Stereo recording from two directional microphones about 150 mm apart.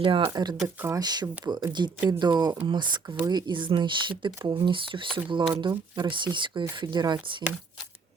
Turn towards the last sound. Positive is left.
turn(degrees=-30)  # may be behind; listen again after turning